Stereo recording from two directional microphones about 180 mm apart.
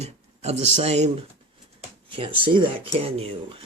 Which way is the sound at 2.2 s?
25° right (ahead or behind).